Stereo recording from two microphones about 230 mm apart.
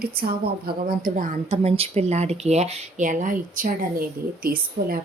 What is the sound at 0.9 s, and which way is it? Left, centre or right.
Speech, right.